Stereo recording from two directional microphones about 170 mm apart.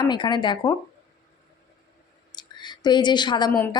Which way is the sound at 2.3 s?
25° left (ahead or behind).